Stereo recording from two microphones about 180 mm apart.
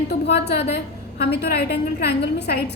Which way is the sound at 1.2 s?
60° left (ahead or behind).